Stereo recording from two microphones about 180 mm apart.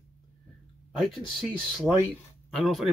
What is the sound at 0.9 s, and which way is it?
Speech, centre (ahead or behind).